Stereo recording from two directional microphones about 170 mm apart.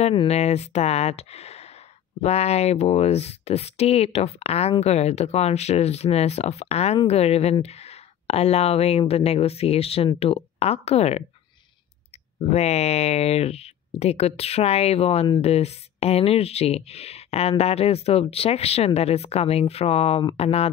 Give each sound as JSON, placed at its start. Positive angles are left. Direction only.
{"t": 0.0, "sound": "speech", "side_deg": 35}
{"t": 12.4, "sound": "speech", "side_deg": 40}